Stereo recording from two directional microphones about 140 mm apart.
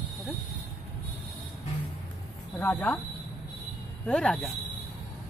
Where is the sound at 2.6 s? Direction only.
10° left (ahead or behind).